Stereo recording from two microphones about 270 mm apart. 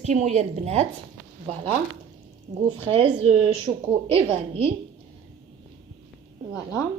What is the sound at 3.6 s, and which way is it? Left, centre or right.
A woman's voice, right.